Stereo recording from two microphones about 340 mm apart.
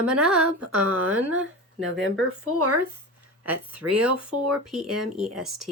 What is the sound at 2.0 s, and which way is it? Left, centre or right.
Speech, right.